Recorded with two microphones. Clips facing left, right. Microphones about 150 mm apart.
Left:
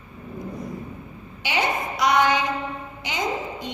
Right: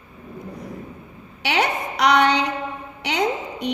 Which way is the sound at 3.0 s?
70° right (ahead or behind).